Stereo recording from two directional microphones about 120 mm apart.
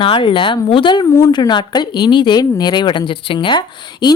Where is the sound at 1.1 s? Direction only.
25° left (ahead or behind).